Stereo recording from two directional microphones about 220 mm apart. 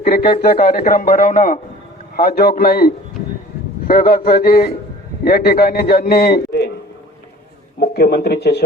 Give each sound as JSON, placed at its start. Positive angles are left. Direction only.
{"t": 0.0, "sound": "a man's voice", "side_deg": 40}
{"t": 7.8, "sound": "speech", "side_deg": 45}